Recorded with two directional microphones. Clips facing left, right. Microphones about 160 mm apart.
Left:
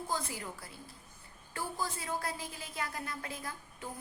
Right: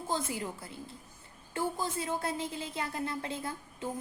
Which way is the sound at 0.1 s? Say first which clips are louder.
Right 6 dB; 25° right (ahead or behind).